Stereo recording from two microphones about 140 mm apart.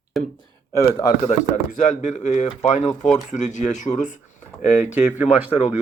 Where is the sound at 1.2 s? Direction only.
55° left (ahead or behind).